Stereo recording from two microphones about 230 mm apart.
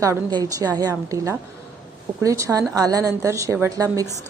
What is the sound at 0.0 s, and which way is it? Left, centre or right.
A woman's voice, centre.